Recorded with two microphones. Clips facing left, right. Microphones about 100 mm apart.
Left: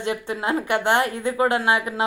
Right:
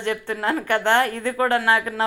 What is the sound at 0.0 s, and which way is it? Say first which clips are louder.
A woman's voice: right 1 dB; 15° left (ahead or behind).